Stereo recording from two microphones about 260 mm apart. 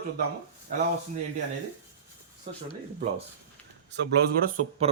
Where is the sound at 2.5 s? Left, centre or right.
Right.